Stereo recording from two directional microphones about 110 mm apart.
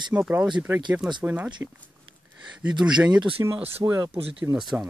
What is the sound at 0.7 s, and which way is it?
Speech, 20° right (ahead or behind).